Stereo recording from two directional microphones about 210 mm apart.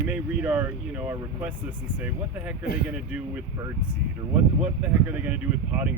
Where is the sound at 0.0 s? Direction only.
5° right (ahead or behind).